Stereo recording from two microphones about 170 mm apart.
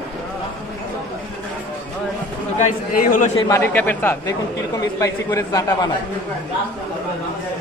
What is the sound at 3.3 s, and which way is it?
A man's voice, 20° left (ahead or behind).